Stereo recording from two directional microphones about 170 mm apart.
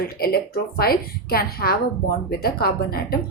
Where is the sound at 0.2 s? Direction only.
65° left (ahead or behind).